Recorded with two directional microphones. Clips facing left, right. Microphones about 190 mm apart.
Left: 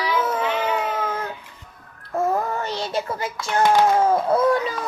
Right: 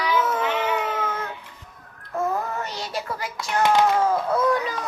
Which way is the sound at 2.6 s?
30° left (ahead or behind).